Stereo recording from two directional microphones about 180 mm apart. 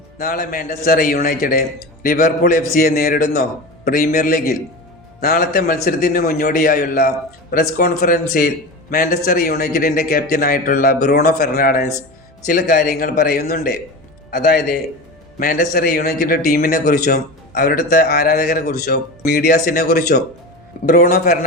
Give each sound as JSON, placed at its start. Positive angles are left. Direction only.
{"t": 0.2, "sound": "a man's voice", "side_deg": 55}